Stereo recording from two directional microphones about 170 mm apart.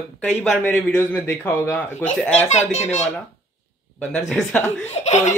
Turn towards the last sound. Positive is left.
turn(degrees=40)  # may be behind; listen again after turning